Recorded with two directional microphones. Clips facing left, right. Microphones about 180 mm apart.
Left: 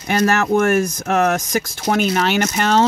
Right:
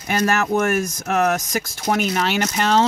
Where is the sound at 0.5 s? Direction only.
55° left (ahead or behind).